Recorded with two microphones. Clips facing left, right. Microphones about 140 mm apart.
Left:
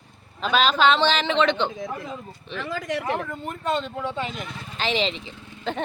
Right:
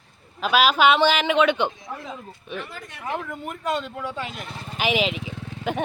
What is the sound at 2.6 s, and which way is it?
Speech, 90° left.